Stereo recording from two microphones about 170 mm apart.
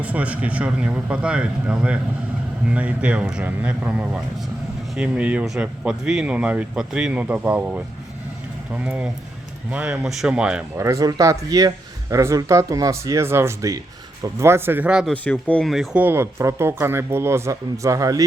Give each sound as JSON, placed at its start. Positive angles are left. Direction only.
{"t": 0.0, "sound": "speech", "side_deg": -10}
{"t": 10.8, "sound": "speech", "side_deg": -20}
{"t": 15.1, "sound": "speech", "side_deg": 10}